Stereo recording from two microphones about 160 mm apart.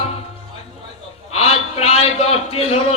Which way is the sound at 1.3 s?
40° left (ahead or behind).